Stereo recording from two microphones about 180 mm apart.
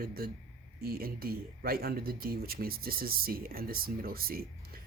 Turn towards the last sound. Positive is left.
turn(degrees=-55)  # may be behind; listen again after turning